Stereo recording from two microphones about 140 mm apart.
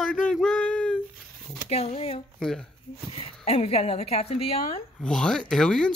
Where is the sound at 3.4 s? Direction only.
45° left (ahead or behind).